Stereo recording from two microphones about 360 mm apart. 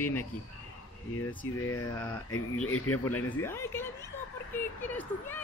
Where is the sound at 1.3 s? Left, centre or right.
Centre.